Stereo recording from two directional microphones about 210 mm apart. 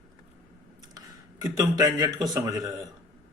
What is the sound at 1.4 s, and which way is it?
Speech, 20° right (ahead or behind).